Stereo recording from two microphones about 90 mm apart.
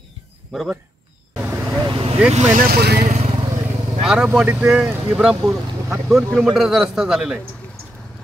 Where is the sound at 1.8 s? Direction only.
70° right (ahead or behind).